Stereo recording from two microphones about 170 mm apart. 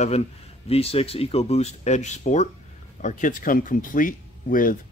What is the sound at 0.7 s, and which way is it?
Speech, 35° left (ahead or behind).